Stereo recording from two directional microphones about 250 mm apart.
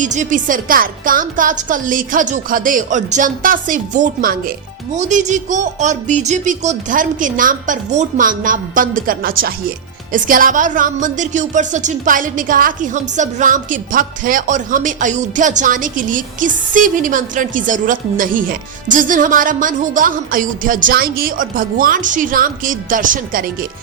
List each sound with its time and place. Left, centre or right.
0.0 s speech: right